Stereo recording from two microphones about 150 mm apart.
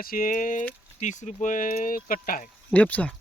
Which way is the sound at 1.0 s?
50° left (ahead or behind).